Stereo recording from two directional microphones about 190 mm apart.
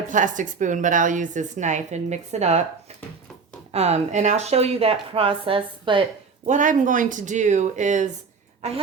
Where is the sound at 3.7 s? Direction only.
35° right (ahead or behind).